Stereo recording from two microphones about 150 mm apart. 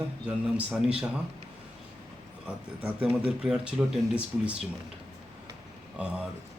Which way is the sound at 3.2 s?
5° right (ahead or behind).